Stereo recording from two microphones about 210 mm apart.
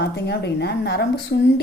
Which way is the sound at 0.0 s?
50° left (ahead or behind).